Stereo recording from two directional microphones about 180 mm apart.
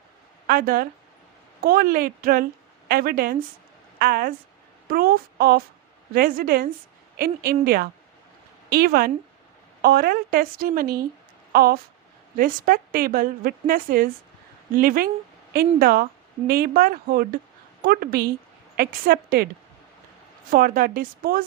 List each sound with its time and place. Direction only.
0.4 s a woman's voice: 55° right (ahead or behind)
20.5 s a woman's voice: 50° right (ahead or behind)